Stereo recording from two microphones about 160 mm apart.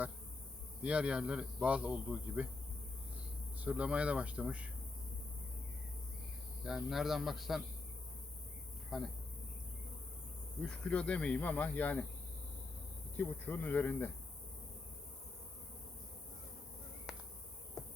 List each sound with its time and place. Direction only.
0.8 s a man's voice: 5° right (ahead or behind)
3.6 s a man's voice: 10° right (ahead or behind)
6.7 s a man's voice: centre (ahead or behind)
8.9 s a man's voice: centre (ahead or behind)
10.6 s speech: 5° left (ahead or behind)
13.1 s speech: 10° left (ahead or behind)
17.1 s a sound: 5° right (ahead or behind)
17.8 s insect: centre (ahead or behind)